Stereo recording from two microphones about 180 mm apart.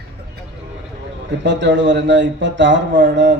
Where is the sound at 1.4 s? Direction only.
80° right.